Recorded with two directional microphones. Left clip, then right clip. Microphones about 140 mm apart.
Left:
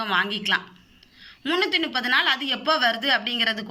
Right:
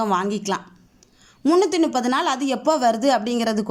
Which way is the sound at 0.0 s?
55° right (ahead or behind).